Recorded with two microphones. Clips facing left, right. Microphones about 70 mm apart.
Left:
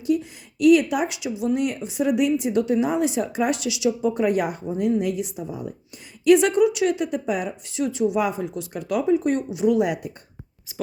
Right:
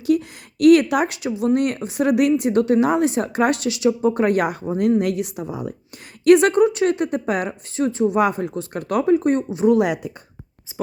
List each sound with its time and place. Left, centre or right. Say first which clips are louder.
0.0 s speech: right 3 dB; right
6.2 s speech: right 3 dB; right
7.8 s speech: right 3 dB; right
8.2 s speech: right 5 dB; right
9.7 s speech: right 3 dB; right